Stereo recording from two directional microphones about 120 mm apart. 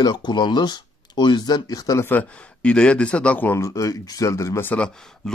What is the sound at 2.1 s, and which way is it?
Speech, 10° left (ahead or behind).